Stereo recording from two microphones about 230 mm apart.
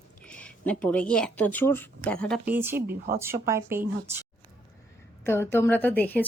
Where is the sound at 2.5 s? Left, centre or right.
Centre.